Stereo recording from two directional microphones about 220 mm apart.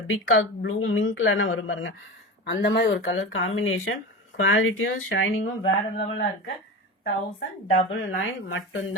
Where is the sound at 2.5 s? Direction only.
50° left (ahead or behind).